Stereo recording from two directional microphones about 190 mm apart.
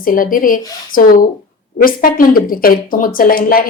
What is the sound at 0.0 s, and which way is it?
Speech, 45° left (ahead or behind).